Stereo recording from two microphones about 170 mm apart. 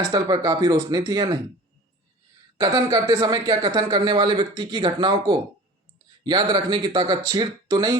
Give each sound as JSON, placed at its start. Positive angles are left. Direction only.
{"t": 0.1, "sound": "speech", "side_deg": -25}
{"t": 2.6, "sound": "speech", "side_deg": -25}